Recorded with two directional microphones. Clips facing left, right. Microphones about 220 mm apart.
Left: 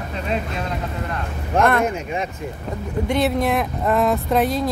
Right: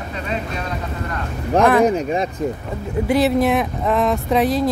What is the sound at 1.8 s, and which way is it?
Speech, 35° right (ahead or behind).